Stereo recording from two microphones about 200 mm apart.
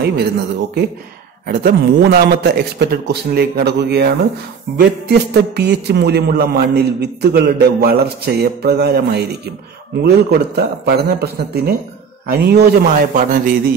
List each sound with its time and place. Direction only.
0.0 s a man's voice: 55° right (ahead or behind)
1.5 s a man's voice: 50° right (ahead or behind)